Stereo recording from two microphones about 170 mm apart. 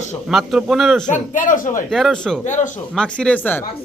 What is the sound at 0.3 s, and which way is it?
Speech, 5° right (ahead or behind).